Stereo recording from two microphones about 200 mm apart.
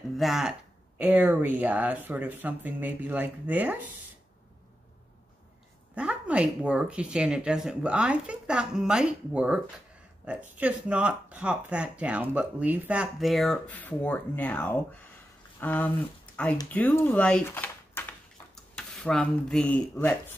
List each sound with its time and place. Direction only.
0.2 s speech: centre (ahead or behind)
5.9 s speech: 5° right (ahead or behind)